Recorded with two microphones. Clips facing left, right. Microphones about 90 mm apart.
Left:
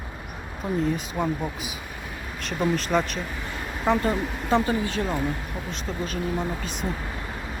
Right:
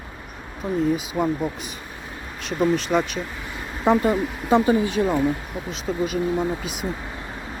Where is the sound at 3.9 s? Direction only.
15° right (ahead or behind).